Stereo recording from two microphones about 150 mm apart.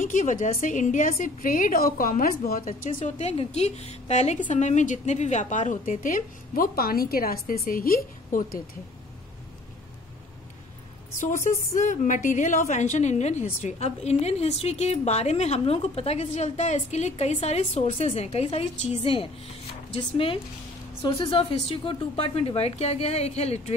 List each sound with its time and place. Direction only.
0.0 s a woman's voice: 60° left (ahead or behind)
11.1 s a woman's voice: 55° left (ahead or behind)